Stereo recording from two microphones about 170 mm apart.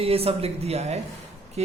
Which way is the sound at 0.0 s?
35° right (ahead or behind).